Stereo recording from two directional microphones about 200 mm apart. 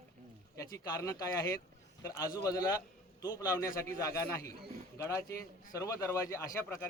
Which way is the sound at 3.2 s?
20° left (ahead or behind).